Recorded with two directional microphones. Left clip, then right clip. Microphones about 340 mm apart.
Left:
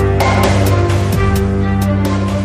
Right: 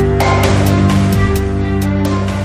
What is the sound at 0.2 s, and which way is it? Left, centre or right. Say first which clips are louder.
Music: left 2 dB; centre.